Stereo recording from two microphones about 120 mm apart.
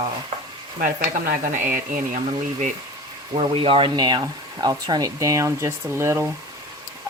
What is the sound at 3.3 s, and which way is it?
Speech, 50° right (ahead or behind).